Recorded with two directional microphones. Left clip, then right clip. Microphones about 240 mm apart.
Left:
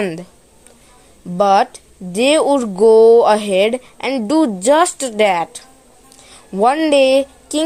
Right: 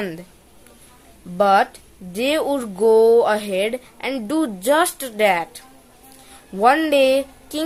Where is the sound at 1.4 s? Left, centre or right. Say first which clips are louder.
Left 3 dB; left.